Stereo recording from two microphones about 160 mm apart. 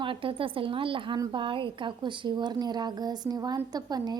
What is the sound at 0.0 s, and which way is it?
A woman's voice, 35° right (ahead or behind).